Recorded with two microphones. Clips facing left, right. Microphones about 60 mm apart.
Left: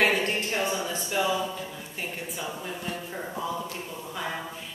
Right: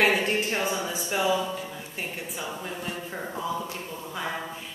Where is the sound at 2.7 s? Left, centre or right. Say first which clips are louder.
Even; centre.